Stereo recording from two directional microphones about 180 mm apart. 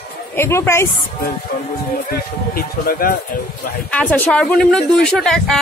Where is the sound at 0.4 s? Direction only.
15° left (ahead or behind).